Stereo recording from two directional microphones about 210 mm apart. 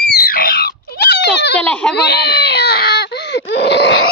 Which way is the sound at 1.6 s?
5° left (ahead or behind).